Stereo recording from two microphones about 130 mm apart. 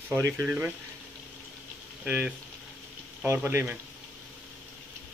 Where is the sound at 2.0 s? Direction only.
10° right (ahead or behind).